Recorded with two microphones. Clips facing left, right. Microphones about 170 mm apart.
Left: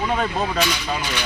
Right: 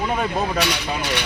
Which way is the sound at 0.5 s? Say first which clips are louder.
Even; 65° right (ahead or behind).